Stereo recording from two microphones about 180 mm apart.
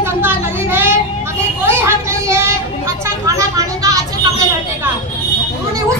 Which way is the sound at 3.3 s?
20° right (ahead or behind).